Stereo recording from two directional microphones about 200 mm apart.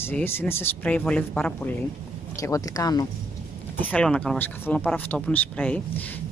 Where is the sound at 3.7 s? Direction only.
5° left (ahead or behind).